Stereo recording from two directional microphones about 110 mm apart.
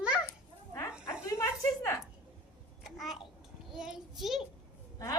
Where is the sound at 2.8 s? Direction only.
5° right (ahead or behind).